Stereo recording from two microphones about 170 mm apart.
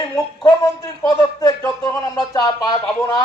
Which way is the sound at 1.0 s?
20° left (ahead or behind).